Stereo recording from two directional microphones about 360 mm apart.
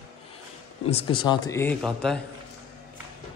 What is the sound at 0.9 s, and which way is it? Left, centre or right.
A man's voice, centre.